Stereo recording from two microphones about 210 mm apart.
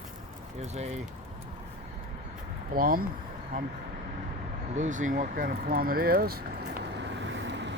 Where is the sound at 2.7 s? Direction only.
45° right (ahead or behind).